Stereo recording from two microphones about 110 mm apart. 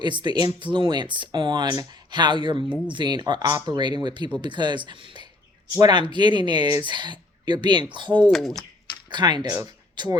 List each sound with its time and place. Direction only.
0.0 s speech: 45° right (ahead or behind)
8.3 s speech: 5° left (ahead or behind)
9.0 s speech: 40° right (ahead or behind)